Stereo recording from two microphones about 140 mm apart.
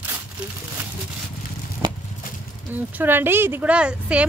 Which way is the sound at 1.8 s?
30° right (ahead or behind).